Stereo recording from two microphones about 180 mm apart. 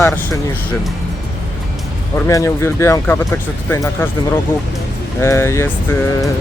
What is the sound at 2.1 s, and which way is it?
Speech, 15° left (ahead or behind).